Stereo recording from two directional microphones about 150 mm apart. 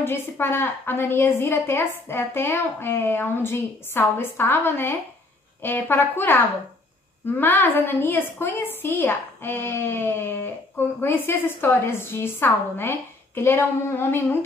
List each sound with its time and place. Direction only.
0.0 s a woman's voice: 15° left (ahead or behind)